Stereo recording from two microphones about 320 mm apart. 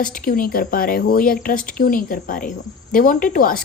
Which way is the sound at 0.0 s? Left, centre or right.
Left.